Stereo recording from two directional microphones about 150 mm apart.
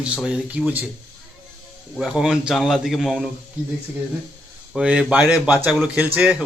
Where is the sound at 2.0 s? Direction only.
5° right (ahead or behind).